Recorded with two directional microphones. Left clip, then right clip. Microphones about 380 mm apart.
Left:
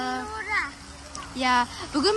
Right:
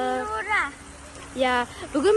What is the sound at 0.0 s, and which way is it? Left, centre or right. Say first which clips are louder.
Vehicle: right 4 dB; centre.